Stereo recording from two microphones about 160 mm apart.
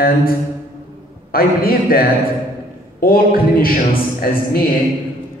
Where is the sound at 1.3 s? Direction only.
65° left (ahead or behind).